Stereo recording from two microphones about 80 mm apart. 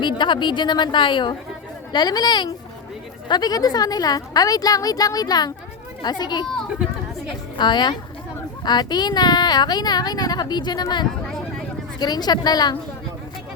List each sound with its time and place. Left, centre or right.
0.0 s speech: left
1.9 s a woman's voice: left
7.5 s speech: left